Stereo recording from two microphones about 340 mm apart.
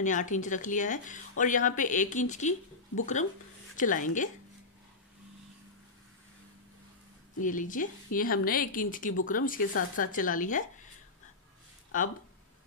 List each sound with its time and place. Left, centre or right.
0.0 s speech: left
3.7 s speech: left
7.3 s speech: left
11.9 s speech: left